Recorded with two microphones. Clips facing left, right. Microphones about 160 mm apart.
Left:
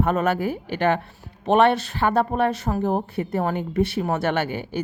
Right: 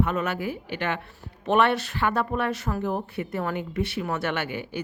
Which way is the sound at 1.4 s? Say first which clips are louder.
Left 4 dB; 25° left (ahead or behind).